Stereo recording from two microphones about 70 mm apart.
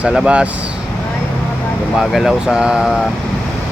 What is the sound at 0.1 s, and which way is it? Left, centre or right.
Speech, centre.